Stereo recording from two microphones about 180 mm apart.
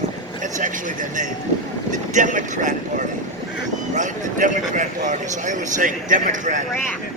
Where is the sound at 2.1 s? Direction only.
45° right (ahead or behind).